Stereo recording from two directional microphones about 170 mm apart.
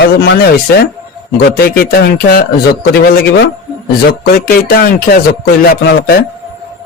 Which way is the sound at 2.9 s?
75° left (ahead or behind).